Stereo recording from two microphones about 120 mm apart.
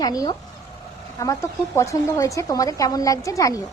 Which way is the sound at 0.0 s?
30° left (ahead or behind).